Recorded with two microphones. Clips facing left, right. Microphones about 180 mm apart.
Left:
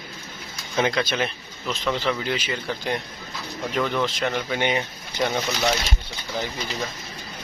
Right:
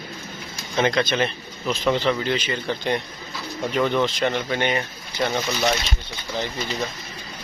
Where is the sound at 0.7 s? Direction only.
5° left (ahead or behind).